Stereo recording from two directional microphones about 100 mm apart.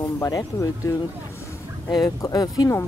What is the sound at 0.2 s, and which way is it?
Speech, 35° left (ahead or behind).